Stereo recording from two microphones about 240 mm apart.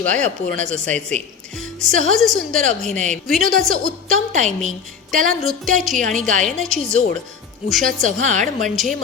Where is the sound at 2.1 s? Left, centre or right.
Centre.